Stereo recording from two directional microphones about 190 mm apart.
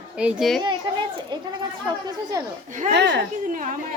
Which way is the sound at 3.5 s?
45° right (ahead or behind).